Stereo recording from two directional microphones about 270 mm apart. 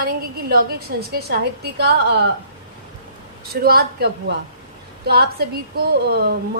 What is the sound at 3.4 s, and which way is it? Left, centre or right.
A woman's voice, right.